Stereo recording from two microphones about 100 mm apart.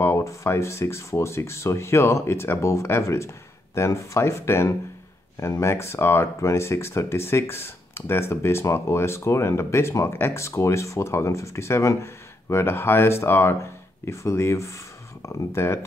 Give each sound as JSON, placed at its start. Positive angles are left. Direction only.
{"t": 0.0, "sound": "speech", "side_deg": 30}